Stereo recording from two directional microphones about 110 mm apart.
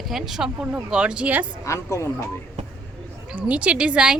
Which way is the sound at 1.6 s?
25° left (ahead or behind).